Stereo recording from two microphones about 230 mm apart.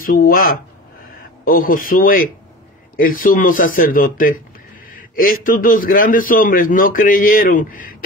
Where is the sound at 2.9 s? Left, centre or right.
Left.